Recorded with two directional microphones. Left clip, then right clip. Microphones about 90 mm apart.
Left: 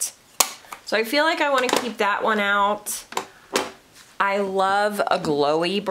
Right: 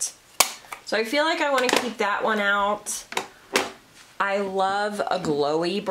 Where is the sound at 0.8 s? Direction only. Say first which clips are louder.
Left 2 dB; 25° left (ahead or behind).